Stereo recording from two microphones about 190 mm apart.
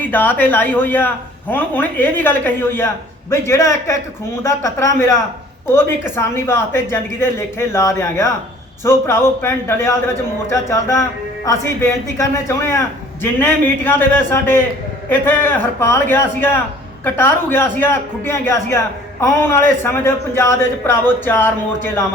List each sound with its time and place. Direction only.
0.0 s a man's voice: 10° left (ahead or behind)